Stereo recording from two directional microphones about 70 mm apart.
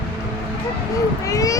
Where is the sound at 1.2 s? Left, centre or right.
Left.